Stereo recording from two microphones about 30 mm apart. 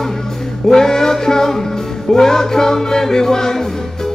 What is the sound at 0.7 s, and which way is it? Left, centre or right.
Music, centre.